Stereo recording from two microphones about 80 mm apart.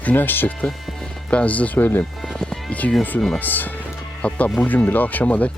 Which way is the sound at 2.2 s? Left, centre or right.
Centre.